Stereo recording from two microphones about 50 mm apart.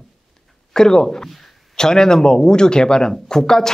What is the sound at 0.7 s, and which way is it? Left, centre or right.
Speech, centre.